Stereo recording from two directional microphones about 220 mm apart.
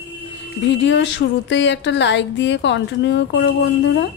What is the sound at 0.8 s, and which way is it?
A woman's voice, 55° left (ahead or behind).